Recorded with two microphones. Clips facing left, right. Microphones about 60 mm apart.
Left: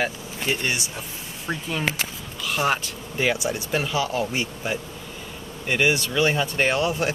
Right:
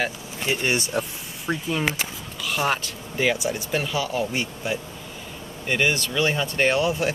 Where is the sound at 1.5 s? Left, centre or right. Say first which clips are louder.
Right 2 dB; centre.